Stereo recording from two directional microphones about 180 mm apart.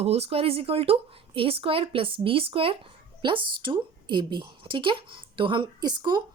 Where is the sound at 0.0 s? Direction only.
35° right (ahead or behind).